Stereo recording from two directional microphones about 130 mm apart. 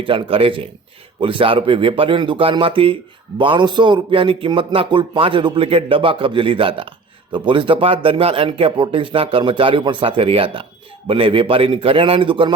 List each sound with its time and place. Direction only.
0.0 s speech: 40° right (ahead or behind)